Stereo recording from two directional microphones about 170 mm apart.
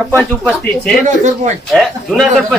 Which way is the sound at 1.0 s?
45° right (ahead or behind).